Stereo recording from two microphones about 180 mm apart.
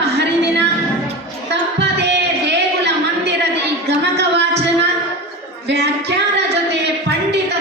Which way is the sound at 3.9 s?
70° right (ahead or behind).